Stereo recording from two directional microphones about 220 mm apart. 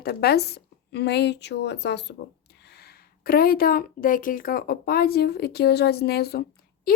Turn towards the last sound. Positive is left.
turn(degrees=45)  # may be behind; listen again after turning